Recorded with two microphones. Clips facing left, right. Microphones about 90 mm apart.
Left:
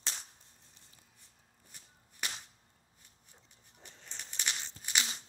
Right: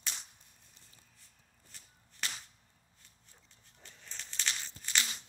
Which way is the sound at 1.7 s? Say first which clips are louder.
Even; 15° left (ahead or behind).